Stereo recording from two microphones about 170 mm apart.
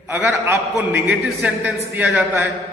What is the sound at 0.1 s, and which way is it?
A man's voice, 10° right (ahead or behind).